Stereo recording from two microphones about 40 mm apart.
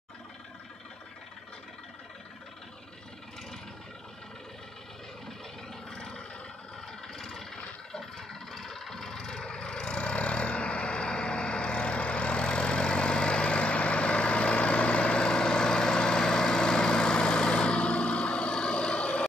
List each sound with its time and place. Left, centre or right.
5.9 s vehicle: left
7.2 s vehicle: centre; by 19.2 s left